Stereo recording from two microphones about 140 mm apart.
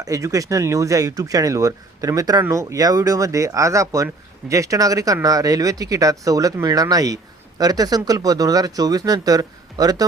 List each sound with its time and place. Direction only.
0.0 s speech: 25° right (ahead or behind)